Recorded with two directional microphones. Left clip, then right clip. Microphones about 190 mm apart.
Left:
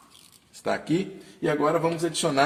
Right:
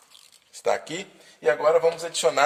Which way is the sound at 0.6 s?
40° right (ahead or behind).